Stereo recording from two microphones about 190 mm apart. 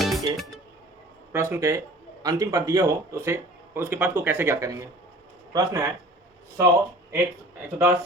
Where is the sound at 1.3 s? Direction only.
15° right (ahead or behind).